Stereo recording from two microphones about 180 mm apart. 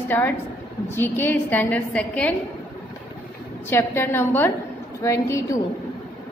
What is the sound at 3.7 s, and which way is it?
A woman's voice, 15° left (ahead or behind).